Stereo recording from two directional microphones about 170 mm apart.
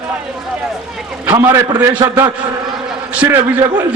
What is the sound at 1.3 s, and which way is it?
Speech, 15° right (ahead or behind).